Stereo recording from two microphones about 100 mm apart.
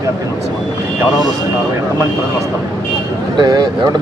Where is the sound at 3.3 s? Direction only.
45° right (ahead or behind).